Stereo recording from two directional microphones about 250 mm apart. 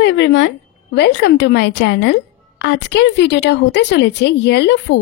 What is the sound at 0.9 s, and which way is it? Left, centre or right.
A woman's voice, left.